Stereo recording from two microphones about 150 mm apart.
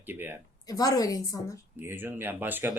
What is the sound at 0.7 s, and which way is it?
Speech, 25° left (ahead or behind).